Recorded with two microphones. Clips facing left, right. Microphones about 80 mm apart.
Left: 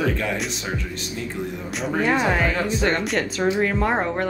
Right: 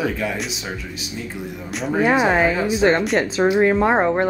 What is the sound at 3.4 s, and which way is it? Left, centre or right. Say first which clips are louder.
Speech: right 6 dB; right.